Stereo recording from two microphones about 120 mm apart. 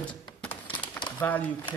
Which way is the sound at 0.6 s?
45° left (ahead or behind).